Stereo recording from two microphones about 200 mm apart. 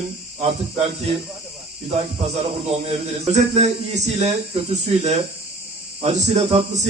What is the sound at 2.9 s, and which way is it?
A man's voice, 35° right (ahead or behind).